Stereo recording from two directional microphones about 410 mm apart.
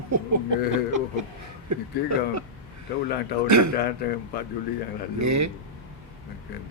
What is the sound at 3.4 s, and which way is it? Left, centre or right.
Speech, right.